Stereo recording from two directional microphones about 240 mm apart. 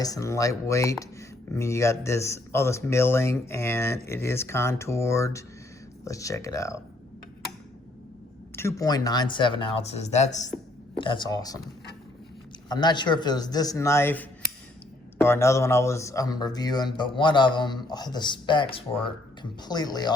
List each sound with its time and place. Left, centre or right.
0.0 s a man's voice: centre
8.5 s a man's voice: centre
12.6 s a man's voice: centre
15.3 s a man's voice: centre